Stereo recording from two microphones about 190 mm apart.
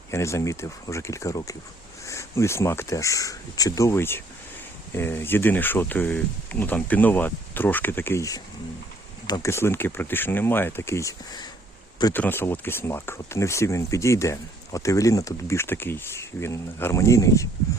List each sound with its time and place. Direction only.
0.1 s speech: 15° left (ahead or behind)